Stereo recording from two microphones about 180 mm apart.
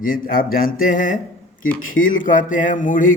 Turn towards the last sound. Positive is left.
turn(degrees=50)  # may be behind; listen again after turning